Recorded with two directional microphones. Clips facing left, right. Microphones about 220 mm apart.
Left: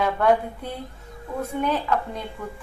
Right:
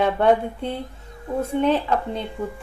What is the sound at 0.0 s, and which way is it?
Speech, 25° right (ahead or behind).